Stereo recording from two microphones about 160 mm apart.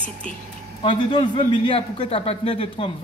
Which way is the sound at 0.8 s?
30° left (ahead or behind).